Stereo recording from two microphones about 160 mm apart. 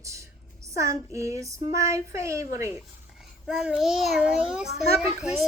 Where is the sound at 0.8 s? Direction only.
20° right (ahead or behind).